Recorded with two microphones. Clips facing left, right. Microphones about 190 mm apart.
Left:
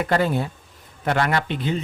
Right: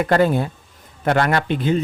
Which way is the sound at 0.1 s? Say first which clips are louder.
Right 5 dB; 50° right (ahead or behind).